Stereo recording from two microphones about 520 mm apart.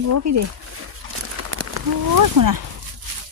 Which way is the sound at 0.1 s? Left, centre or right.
Right.